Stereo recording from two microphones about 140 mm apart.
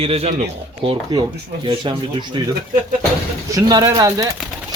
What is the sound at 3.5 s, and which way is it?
Speech, 30° right (ahead or behind).